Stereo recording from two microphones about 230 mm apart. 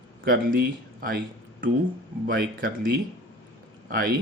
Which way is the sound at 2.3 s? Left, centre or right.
Right.